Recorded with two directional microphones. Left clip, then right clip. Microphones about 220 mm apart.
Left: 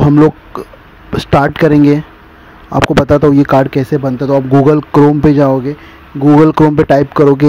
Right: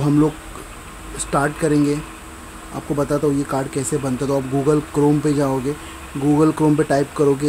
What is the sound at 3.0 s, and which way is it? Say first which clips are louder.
Speech: left 11 dB; 35° left (ahead or behind).